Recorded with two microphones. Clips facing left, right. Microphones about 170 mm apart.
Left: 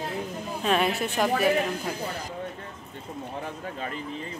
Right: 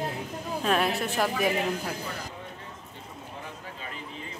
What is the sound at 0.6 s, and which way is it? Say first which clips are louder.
Speech: left 2 dB; centre (ahead or behind).